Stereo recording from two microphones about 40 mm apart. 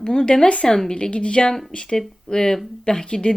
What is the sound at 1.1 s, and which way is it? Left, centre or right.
Speech, left.